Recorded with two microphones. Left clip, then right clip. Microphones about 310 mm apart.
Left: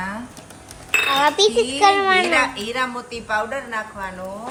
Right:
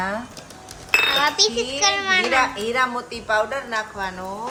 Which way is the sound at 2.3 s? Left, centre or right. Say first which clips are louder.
Even; right.